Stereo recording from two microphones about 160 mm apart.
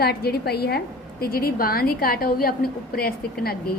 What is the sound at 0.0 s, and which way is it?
Speech, 80° left.